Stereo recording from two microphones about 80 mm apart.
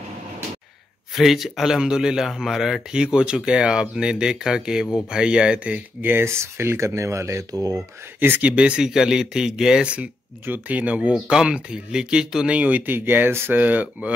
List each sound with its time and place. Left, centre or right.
1.1 s speech: centre
6.1 s speech: right
8.2 s speech: right
10.4 s speech: right
12.5 s speech: centre